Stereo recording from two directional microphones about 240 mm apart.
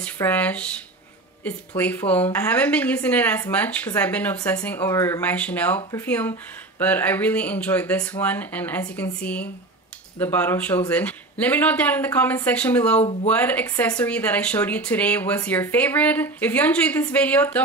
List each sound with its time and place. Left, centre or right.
0.0 s speech: centre
1.8 s speech: centre
13.0 s speech: left
13.3 s speech: centre